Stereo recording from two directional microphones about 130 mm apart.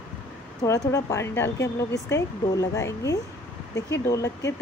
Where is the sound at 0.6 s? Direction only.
25° left (ahead or behind).